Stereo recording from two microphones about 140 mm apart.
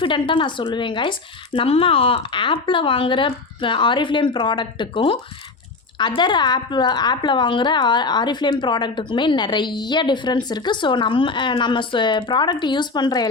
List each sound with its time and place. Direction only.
0.0 s a woman's voice: 35° left (ahead or behind)